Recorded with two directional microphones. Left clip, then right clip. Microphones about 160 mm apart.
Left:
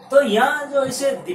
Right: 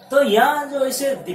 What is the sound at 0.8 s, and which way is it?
Speech, 20° left (ahead or behind).